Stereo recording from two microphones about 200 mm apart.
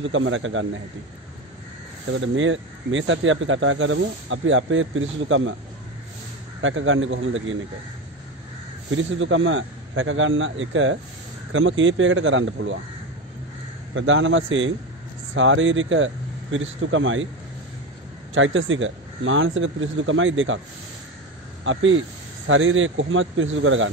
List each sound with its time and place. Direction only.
0.0 s speech: 75° right (ahead or behind)
2.1 s speech: 75° right (ahead or behind)
6.6 s speech: 75° right (ahead or behind)
8.9 s speech: 75° right (ahead or behind)
13.9 s speech: 75° right (ahead or behind)
18.3 s speech: 75° right (ahead or behind)
21.7 s speech: 80° right